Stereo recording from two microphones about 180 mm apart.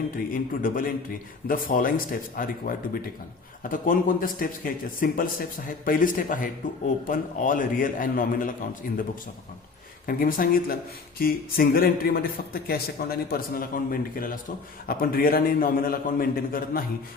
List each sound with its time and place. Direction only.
0.2 s speech: 50° left (ahead or behind)
10.1 s a man's voice: 50° left (ahead or behind)